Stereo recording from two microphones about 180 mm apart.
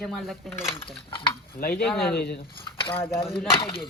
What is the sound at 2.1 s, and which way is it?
Speech, 65° left (ahead or behind).